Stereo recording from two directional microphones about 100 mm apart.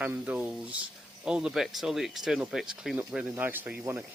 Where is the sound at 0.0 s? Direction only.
15° right (ahead or behind).